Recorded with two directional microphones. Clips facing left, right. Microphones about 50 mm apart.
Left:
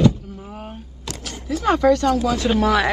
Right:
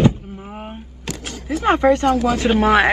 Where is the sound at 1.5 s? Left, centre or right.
Right.